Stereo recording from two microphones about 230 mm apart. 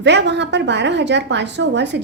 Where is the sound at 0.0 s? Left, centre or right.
Right.